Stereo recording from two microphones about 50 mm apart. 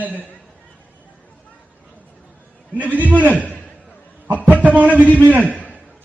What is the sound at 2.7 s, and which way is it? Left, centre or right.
Speech, right.